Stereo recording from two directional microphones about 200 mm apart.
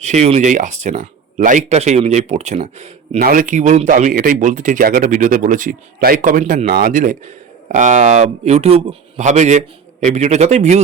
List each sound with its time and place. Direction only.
0.0 s speech: 35° right (ahead or behind)
3.2 s speech: 45° right (ahead or behind)